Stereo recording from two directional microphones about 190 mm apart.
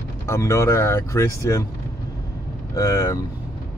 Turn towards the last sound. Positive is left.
turn(degrees=15)  # may be behind; listen again after turning